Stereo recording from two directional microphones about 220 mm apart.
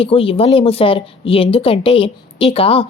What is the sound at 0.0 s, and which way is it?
Speech, 25° left (ahead or behind).